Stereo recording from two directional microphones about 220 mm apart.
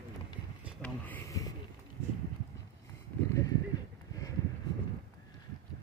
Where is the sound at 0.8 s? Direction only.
10° left (ahead or behind).